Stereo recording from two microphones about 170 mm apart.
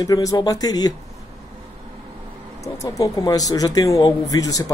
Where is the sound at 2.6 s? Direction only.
20° left (ahead or behind).